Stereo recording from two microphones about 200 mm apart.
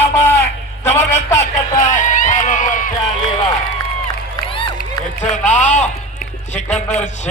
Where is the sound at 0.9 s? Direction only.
35° left (ahead or behind).